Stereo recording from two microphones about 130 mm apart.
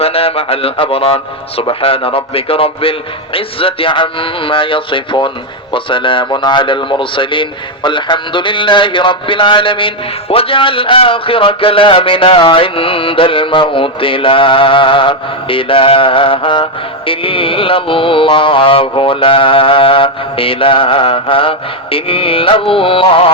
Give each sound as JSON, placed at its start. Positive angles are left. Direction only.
{"t": 0.0, "sound": "mantra", "side_deg": 50}
{"t": 3.3, "sound": "speech", "side_deg": 45}
{"t": 17.1, "sound": "mantra", "side_deg": 45}